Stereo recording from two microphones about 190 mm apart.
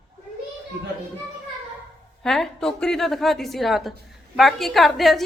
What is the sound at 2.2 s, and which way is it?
A woman's voice, centre (ahead or behind).